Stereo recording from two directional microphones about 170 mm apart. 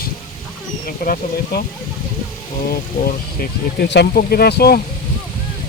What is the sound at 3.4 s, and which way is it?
Speech, 80° left.